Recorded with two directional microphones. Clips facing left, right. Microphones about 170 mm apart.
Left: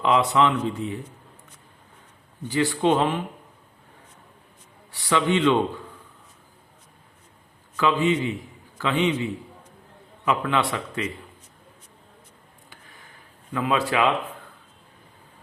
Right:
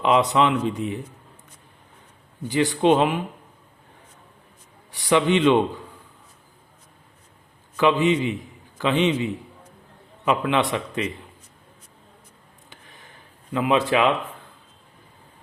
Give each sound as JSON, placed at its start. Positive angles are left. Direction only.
{"t": 0.0, "sound": "a man's voice", "side_deg": -20}
{"t": 2.5, "sound": "speech", "side_deg": -20}
{"t": 4.9, "sound": "a man's voice", "side_deg": -20}
{"t": 7.8, "sound": "speech", "side_deg": -20}
{"t": 13.5, "sound": "speech", "side_deg": -20}